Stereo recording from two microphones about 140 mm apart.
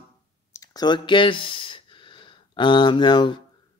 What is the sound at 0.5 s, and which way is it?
Speech, 30° left (ahead or behind).